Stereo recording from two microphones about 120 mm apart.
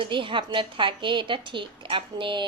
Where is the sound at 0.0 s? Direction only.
45° right (ahead or behind).